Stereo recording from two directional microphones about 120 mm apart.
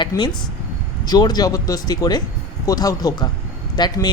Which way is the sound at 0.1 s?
25° left (ahead or behind).